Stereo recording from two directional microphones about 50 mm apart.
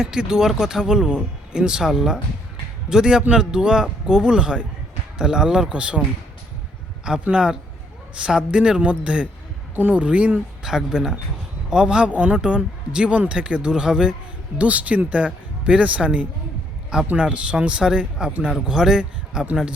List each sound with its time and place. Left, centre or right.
0.0 s speech: centre
7.0 s speech: centre
10.6 s speech: centre
14.6 s a man's voice: right